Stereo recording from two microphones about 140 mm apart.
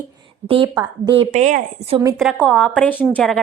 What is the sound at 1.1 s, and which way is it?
Speech, 55° right (ahead or behind).